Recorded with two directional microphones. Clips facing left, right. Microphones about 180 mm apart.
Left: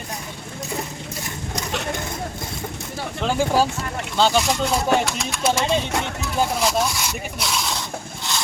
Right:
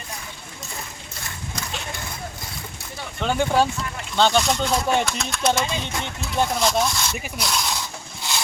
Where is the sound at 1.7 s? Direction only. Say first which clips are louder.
Left 10 dB; 65° left (ahead or behind).